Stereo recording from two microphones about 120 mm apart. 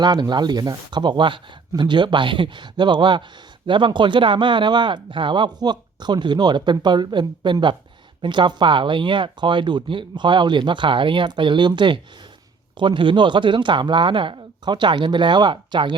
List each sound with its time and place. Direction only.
0.0 s speech: 35° right (ahead or behind)